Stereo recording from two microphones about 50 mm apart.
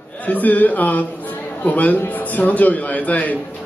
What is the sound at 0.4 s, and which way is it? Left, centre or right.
A man's voice, left.